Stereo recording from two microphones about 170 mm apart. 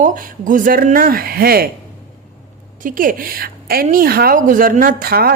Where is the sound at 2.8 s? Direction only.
55° right (ahead or behind).